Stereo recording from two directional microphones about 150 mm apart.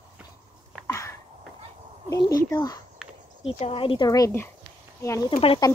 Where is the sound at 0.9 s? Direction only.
20° left (ahead or behind).